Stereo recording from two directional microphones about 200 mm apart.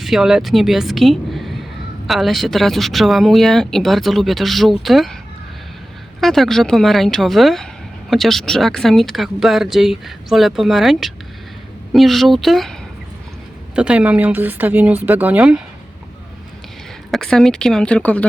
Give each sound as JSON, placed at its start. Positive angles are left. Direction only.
{"t": 0.0, "sound": "a woman's voice", "side_deg": 0}
{"t": 6.1, "sound": "speech", "side_deg": 0}
{"t": 13.7, "sound": "speech", "side_deg": -5}
{"t": 17.1, "sound": "speech", "side_deg": 0}